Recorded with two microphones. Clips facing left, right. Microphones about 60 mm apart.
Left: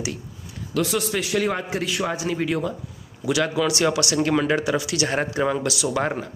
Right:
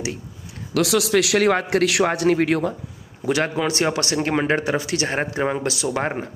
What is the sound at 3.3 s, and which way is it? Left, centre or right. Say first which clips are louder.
Speech: even; right.